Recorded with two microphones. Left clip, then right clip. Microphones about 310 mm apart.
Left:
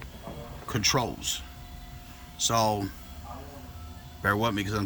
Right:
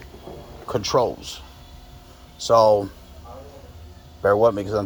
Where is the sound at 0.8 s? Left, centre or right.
Centre.